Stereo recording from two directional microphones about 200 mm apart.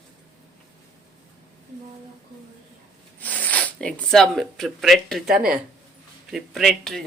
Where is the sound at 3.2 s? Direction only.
5° left (ahead or behind).